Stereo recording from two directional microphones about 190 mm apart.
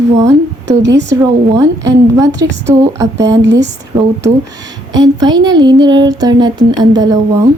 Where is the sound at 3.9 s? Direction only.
20° right (ahead or behind).